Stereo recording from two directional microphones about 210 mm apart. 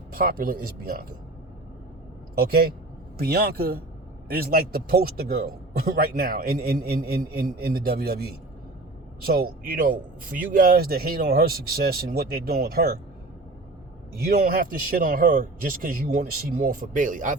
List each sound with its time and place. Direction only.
0.1 s a man's voice: 45° right (ahead or behind)
2.4 s a man's voice: 45° right (ahead or behind)
14.2 s a man's voice: 45° right (ahead or behind)